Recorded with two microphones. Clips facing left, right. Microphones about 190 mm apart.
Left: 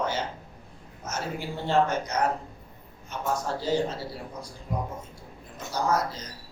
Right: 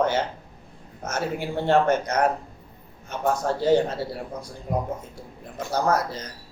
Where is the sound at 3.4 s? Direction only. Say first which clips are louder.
Right 8 dB; 60° right (ahead or behind).